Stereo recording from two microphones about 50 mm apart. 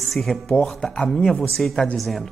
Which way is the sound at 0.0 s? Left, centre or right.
Centre.